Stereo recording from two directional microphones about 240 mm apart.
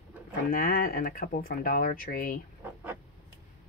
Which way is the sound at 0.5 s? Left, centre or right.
Left.